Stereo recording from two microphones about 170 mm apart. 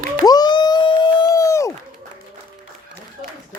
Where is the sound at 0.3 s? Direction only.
25° left (ahead or behind).